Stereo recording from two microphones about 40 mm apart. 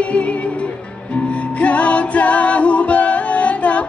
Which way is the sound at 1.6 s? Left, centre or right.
Left.